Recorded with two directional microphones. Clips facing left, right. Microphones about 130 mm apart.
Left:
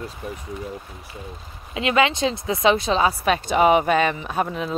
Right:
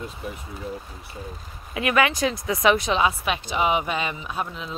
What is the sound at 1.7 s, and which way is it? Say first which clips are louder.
Speech: left 2 dB; 25° left (ahead or behind).